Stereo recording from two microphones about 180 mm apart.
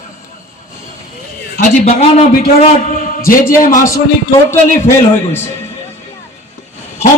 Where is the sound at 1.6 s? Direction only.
45° left (ahead or behind).